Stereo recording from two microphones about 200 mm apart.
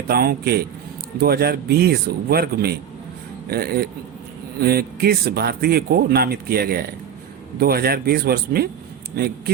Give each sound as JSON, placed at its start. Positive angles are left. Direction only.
{"t": 0.1, "sound": "speech", "side_deg": -50}